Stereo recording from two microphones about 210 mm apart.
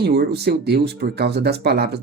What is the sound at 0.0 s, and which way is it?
Speech, 50° right (ahead or behind).